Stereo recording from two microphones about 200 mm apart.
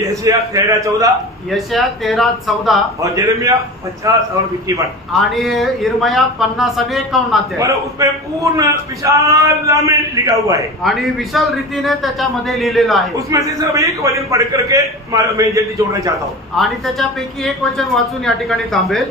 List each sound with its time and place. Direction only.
0.1 s a man's voice: 15° right (ahead or behind)
1.5 s a man's voice: centre (ahead or behind)
3.0 s a man's voice: 15° right (ahead or behind)
5.3 s a man's voice: centre (ahead or behind)
7.5 s a man's voice: 15° right (ahead or behind)
10.8 s a man's voice: centre (ahead or behind)
13.3 s a man's voice: 15° right (ahead or behind)
16.5 s a man's voice: centre (ahead or behind)